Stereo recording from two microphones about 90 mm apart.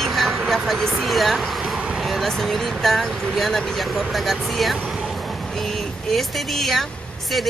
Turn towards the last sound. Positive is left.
turn(degrees=0)  # may be behind; listen again after turning